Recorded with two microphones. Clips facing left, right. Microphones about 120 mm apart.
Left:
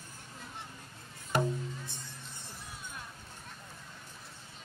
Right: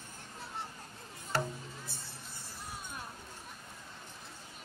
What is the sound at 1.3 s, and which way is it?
Music, 15° left (ahead or behind).